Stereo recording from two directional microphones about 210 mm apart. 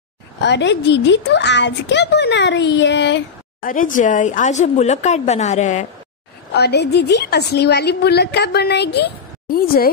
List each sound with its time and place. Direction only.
0.4 s speech: 55° left (ahead or behind)
3.6 s speech: 40° left (ahead or behind)
6.5 s a woman's voice: 50° left (ahead or behind)